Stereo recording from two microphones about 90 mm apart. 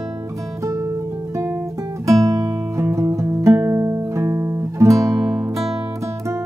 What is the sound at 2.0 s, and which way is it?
Music, 35° right (ahead or behind).